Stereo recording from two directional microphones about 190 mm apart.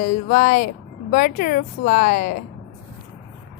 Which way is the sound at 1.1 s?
45° left (ahead or behind).